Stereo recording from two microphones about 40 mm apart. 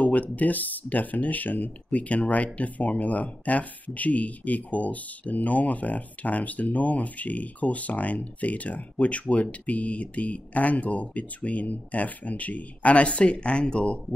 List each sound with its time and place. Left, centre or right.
0.0 s speech: left